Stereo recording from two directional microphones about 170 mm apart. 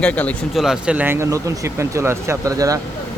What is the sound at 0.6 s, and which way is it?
A man's voice, 5° right (ahead or behind).